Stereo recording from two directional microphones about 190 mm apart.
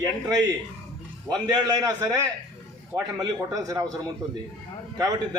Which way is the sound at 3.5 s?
20° right (ahead or behind).